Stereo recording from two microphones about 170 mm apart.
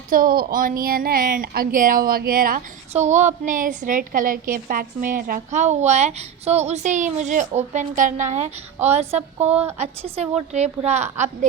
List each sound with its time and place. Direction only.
0.1 s a woman's voice: 55° right (ahead or behind)
2.9 s a woman's voice: 45° right (ahead or behind)